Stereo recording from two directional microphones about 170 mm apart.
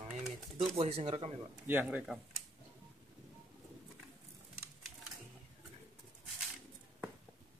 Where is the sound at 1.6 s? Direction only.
10° right (ahead or behind).